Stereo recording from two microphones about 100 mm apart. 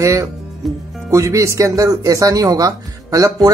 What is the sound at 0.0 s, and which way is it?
Speech, 30° right (ahead or behind).